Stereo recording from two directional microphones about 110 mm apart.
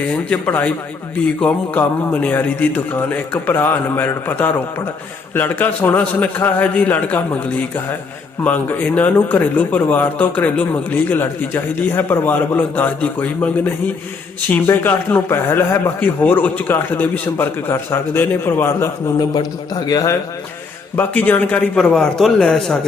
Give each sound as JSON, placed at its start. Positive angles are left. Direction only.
{"t": 0.3, "sound": "a man's voice", "side_deg": 15}
{"t": 8.4, "sound": "a man's voice", "side_deg": 15}
{"t": 20.9, "sound": "a man's voice", "side_deg": 15}
{"t": 21.9, "sound": "speech", "side_deg": 5}